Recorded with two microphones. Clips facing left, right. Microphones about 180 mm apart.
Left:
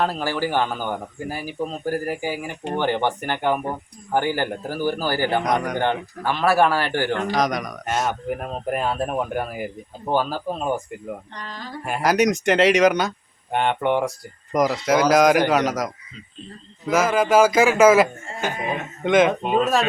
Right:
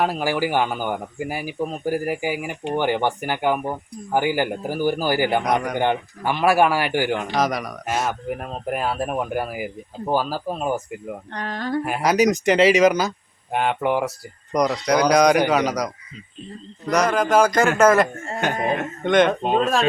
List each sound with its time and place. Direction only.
0.0 s speech: 10° right (ahead or behind)
11.3 s speech: 60° right (ahead or behind)
11.9 s speech: centre (ahead or behind)
18.3 s speech: 60° right (ahead or behind)
19.0 s speech: centre (ahead or behind)